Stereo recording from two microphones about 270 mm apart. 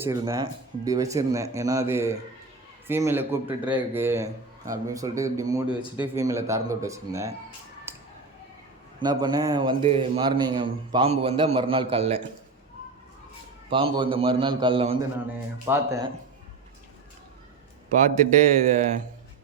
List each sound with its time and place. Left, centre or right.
0.0 s a man's voice: centre
7.9 s a sound: centre
9.0 s a man's voice: centre
13.7 s a man's voice: centre
17.9 s a man's voice: right